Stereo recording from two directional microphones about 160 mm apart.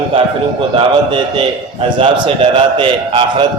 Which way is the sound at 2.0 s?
35° right (ahead or behind).